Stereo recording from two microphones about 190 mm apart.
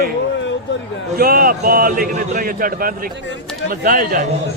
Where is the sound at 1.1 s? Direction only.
50° right (ahead or behind).